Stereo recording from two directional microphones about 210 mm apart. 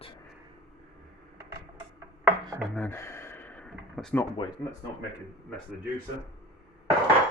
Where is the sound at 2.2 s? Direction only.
5° right (ahead or behind).